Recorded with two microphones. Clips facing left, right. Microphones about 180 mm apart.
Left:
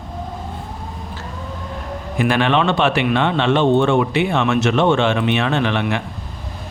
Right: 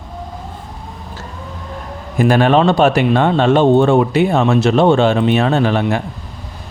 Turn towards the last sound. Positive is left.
turn(degrees=-40)  # may be behind; listen again after turning